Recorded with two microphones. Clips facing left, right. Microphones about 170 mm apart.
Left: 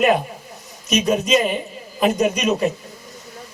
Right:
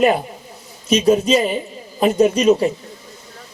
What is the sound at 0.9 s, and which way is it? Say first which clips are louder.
Speech: right 4 dB; 30° right (ahead or behind).